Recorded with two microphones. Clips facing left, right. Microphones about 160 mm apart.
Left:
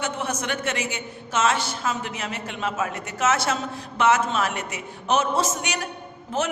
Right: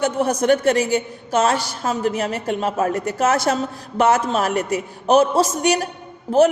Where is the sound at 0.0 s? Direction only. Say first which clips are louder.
Right 9 dB; 40° right (ahead or behind).